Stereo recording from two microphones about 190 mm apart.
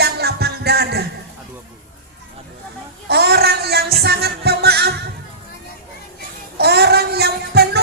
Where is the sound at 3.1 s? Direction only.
60° right (ahead or behind).